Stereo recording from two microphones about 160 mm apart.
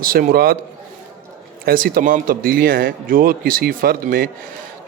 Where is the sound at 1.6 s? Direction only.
65° right (ahead or behind).